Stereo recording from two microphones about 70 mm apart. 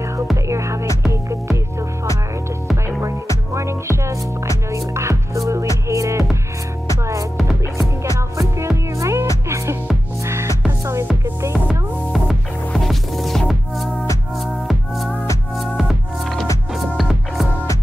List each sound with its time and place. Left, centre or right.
0.5 s music: right
3.5 s music: right
8.4 s music: right
11.6 s music: centre